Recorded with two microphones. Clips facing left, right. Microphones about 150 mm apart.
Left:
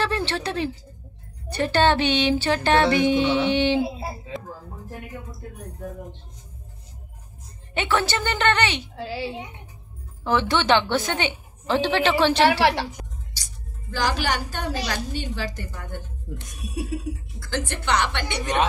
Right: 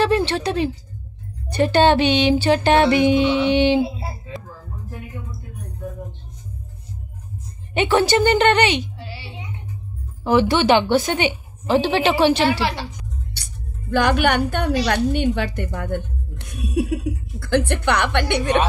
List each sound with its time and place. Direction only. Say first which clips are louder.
0.0 s a woman's voice: right 7 dB; 15° right (ahead or behind)
1.5 s music: right 5 dB; 15° right (ahead or behind)
7.7 s music: right 7 dB; 15° right (ahead or behind)
10.2 s music: right 5 dB; 10° right (ahead or behind)
12.4 s a woman's voice: left 1 dB; 70° left (ahead or behind)
13.3 s a woman's voice: right 8 dB; 60° right (ahead or behind)